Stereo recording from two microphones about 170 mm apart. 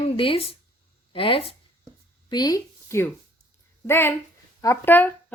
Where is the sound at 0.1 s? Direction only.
35° left (ahead or behind).